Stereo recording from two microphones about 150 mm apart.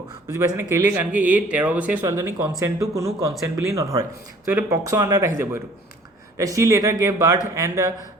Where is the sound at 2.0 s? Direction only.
20° right (ahead or behind).